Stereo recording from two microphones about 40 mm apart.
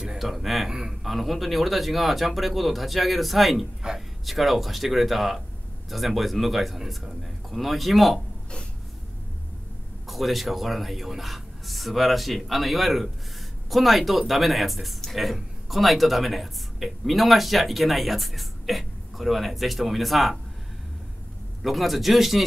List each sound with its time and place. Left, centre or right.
0.2 s a sound: centre
1.0 s speech: centre
3.8 s speech: centre
4.3 s speech: centre
10.0 s speech: centre
21.6 s speech: centre